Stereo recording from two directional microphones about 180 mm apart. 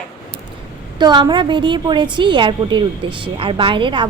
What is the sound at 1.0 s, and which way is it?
A woman's voice, 25° right (ahead or behind).